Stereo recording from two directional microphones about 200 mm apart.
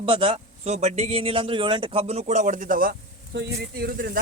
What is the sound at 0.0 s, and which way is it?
A man's voice, 25° right (ahead or behind).